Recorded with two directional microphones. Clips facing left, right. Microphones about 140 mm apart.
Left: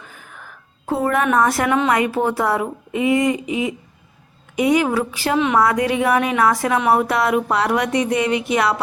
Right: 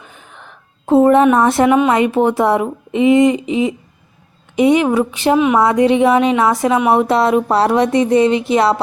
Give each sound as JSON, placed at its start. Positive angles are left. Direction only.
{"t": 0.0, "sound": "a woman's voice", "side_deg": -20}